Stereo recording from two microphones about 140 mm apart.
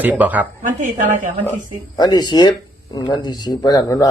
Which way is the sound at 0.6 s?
65° right (ahead or behind).